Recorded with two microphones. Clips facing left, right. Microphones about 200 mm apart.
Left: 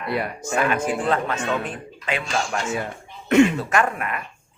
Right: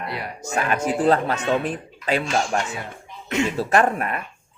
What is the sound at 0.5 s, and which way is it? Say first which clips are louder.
Speech: even; 40° right (ahead or behind).